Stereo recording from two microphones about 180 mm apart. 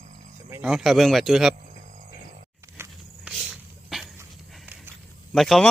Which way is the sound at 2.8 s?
5° right (ahead or behind).